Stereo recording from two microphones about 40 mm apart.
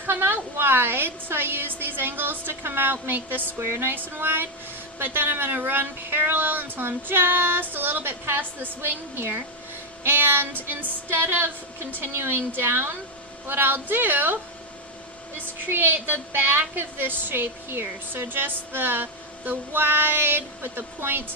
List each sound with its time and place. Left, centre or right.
0.1 s speech: right
3.6 s a sound: right
3.9 s speech: right
8.9 s a woman's voice: right
15.7 s speech: right